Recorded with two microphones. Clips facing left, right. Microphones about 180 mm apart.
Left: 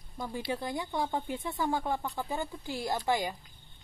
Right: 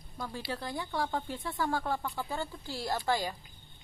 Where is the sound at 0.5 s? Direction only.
20° left (ahead or behind).